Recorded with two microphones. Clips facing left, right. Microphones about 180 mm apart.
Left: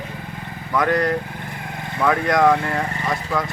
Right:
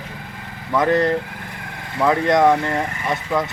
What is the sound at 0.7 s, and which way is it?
Speech, 25° right (ahead or behind).